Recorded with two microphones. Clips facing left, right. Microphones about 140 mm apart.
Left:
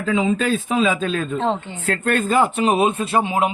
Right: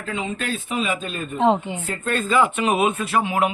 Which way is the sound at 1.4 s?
15° right (ahead or behind).